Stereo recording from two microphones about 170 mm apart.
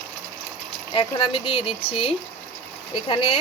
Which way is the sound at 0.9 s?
30° left (ahead or behind).